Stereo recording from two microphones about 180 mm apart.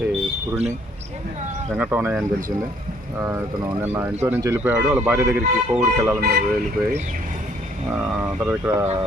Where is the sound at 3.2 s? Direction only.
15° right (ahead or behind).